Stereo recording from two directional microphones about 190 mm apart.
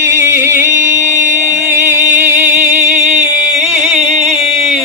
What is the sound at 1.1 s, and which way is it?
Music, 40° right (ahead or behind).